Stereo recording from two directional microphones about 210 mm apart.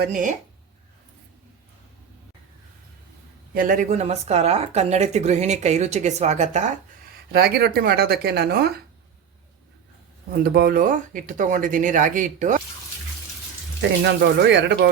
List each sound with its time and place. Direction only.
0.0 s speech: 40° right (ahead or behind)
3.5 s speech: 40° right (ahead or behind)
7.3 s speech: 50° right (ahead or behind)
10.4 s speech: 50° right (ahead or behind)
14.0 s speech: 55° right (ahead or behind)